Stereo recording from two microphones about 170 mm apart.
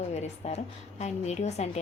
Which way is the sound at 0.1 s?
40° left (ahead or behind).